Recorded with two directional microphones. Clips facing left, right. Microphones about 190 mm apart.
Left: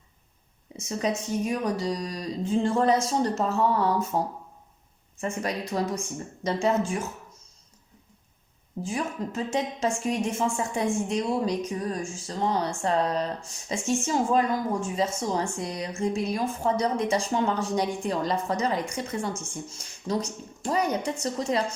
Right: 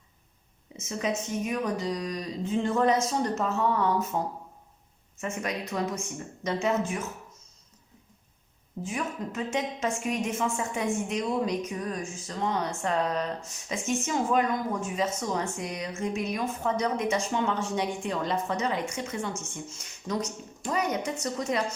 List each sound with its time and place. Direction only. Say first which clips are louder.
0.8 s speech: left 2 dB; 35° left (ahead or behind)
8.8 s speech: left 2 dB; 30° left (ahead or behind)